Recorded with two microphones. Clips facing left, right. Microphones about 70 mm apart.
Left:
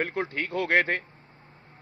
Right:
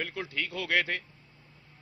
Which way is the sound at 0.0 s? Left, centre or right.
Left.